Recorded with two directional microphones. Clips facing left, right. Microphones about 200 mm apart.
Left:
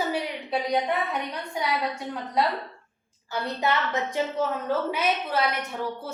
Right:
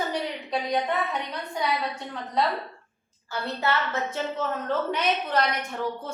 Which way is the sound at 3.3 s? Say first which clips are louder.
Left 1 dB; 15° left (ahead or behind).